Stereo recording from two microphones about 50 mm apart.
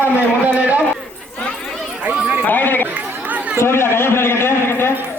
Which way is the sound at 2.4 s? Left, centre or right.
Left.